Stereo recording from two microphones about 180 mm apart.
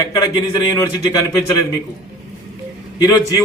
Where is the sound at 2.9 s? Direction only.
20° left (ahead or behind).